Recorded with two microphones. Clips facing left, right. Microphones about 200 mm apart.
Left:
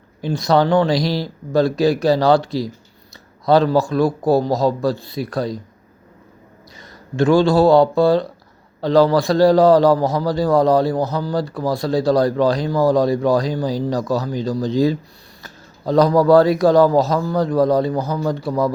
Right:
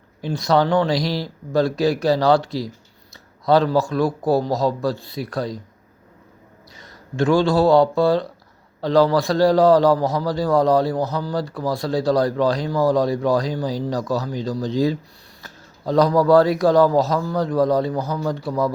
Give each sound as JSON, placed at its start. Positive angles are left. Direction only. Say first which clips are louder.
{"t": 0.2, "sound": "a man's voice", "louder": "left 2 dB", "side_deg": 25}
{"t": 7.2, "sound": "a man's voice", "louder": "left 3 dB", "side_deg": 25}